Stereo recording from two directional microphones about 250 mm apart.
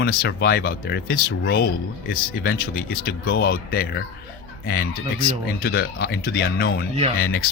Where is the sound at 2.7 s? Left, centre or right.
Left.